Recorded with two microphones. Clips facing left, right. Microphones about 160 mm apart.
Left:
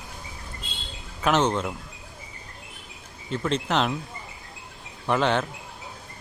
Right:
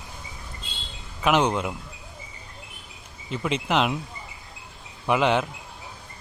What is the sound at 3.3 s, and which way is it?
Speech, 5° right (ahead or behind).